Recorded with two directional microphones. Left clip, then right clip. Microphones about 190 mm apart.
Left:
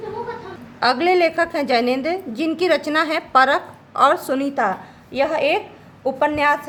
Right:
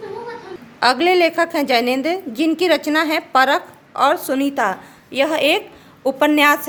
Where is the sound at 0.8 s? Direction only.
10° right (ahead or behind).